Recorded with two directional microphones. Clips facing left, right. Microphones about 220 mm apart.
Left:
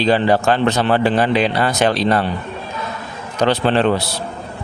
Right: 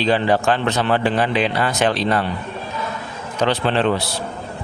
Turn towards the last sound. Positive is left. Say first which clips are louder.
# left 3 dB
turn(degrees=40)  # may be behind; listen again after turning